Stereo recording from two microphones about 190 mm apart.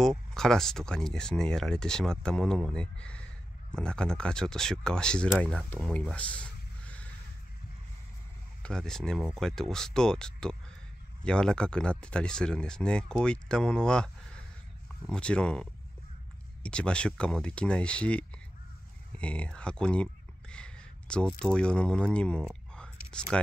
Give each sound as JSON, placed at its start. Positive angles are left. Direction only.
{"t": 0.3, "sound": "speech", "side_deg": 0}
{"t": 8.6, "sound": "speech", "side_deg": 5}
{"t": 19.1, "sound": "a sound", "side_deg": 5}
{"t": 21.4, "sound": "speech", "side_deg": 5}
{"t": 22.5, "sound": "whispering", "side_deg": 5}